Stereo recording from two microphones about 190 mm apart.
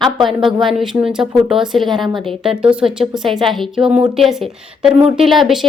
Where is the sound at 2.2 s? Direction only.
25° right (ahead or behind).